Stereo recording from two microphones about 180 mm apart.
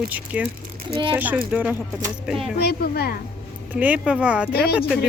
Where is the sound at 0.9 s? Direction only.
30° right (ahead or behind).